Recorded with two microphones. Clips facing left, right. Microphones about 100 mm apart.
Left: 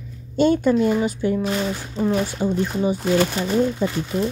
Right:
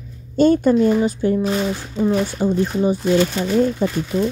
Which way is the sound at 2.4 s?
35° right (ahead or behind).